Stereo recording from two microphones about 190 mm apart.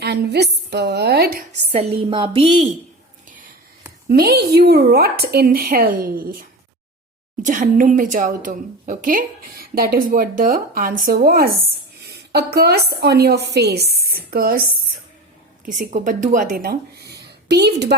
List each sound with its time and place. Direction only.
0.0 s a sound: 60° right (ahead or behind)
1.7 s a woman's voice: 30° right (ahead or behind)
3.2 s whispering: 45° right (ahead or behind)
4.1 s a woman's voice: 55° right (ahead or behind)
7.4 s a woman's voice: 40° right (ahead or behind)
15.6 s speech: 45° right (ahead or behind); by 17.9 s 60° right (ahead or behind)